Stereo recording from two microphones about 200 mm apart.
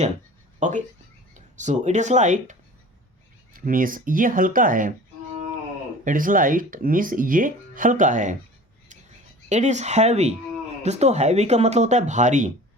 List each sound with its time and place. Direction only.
0.6 s speech: 35° right (ahead or behind)
6.1 s speech: 45° right (ahead or behind)
9.5 s speech: 35° right (ahead or behind)